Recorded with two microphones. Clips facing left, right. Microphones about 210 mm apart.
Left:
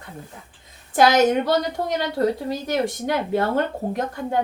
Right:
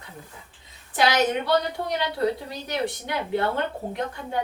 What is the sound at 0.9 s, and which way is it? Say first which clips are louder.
A woman's voice: left 6 dB; 45° left (ahead or behind).